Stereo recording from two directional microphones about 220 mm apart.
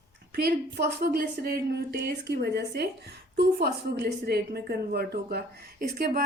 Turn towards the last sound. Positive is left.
turn(degrees=-40)  # may be behind; listen again after turning